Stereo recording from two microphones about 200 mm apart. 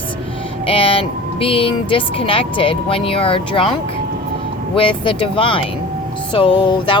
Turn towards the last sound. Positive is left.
turn(degrees=25)  # may be behind; listen again after turning